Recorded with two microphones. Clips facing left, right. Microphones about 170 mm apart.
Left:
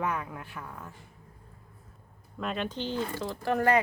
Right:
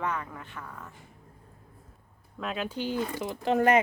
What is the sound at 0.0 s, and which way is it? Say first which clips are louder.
Speech: left 1 dB; 10° left (ahead or behind).